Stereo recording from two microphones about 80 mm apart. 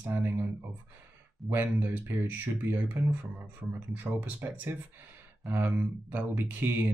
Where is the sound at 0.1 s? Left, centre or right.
Right.